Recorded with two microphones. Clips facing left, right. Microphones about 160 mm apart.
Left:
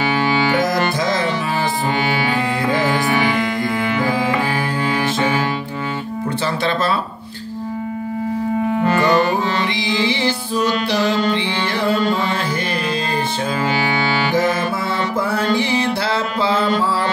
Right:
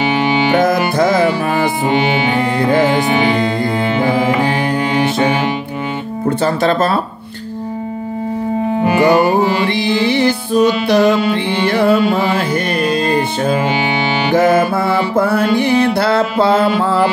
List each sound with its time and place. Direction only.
0.0 s music: 20° right (ahead or behind)
0.9 s music: 60° right (ahead or behind)
1.9 s music: 20° right (ahead or behind)
6.2 s speech: 45° right (ahead or behind)
8.8 s music: 15° right (ahead or behind)
9.8 s music: 55° right (ahead or behind)
14.3 s music: 55° right (ahead or behind)
16.6 s music: 5° right (ahead or behind)